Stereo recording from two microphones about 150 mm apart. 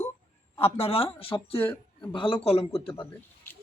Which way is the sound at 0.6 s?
40° left (ahead or behind).